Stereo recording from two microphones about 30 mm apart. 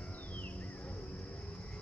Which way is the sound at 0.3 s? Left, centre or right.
Left.